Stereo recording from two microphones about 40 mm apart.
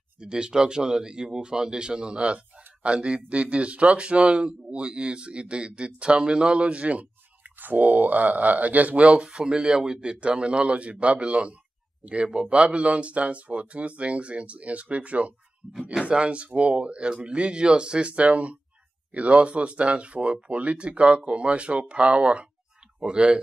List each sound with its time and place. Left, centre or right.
0.2 s speech: centre
7.5 s speech: right